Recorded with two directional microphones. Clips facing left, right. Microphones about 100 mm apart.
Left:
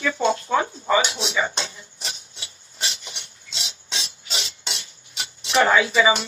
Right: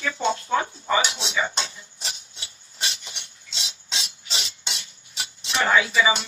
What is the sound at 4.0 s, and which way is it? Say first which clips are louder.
Filing: left 2 dB; 30° left (ahead or behind).